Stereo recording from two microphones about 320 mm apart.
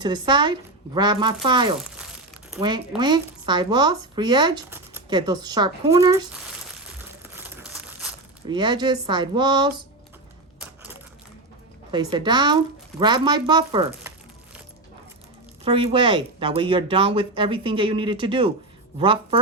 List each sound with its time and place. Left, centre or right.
0.0 s speech: centre
7.3 s crumpling: centre
8.4 s speech: centre
11.9 s speech: centre
15.6 s speech: centre